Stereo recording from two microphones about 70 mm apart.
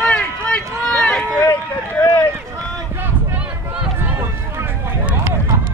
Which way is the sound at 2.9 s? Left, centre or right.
Right.